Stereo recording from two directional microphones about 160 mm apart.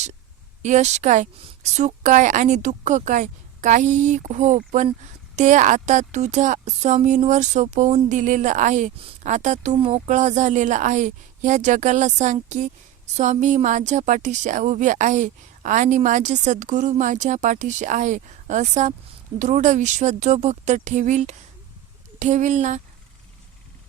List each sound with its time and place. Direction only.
0.6 s a woman's voice: 45° right (ahead or behind)
9.0 s a woman's voice: 35° right (ahead or behind)
9.3 s a woman's voice: 50° right (ahead or behind)